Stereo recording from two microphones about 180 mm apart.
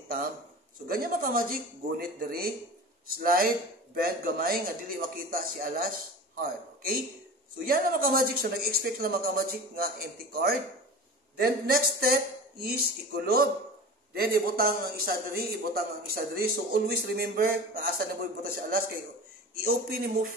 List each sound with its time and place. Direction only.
0.8 s a man's voice: 55° right (ahead or behind)